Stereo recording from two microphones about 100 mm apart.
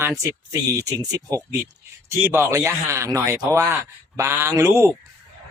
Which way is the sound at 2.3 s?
25° right (ahead or behind).